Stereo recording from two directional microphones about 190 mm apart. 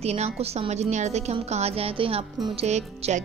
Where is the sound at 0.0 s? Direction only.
35° right (ahead or behind).